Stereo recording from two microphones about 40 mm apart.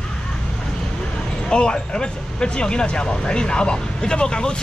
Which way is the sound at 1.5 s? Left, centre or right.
Left.